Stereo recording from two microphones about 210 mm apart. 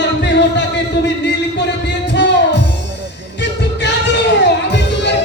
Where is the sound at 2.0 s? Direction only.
55° left (ahead or behind).